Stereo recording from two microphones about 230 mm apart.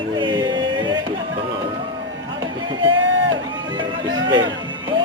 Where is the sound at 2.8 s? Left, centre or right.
Right.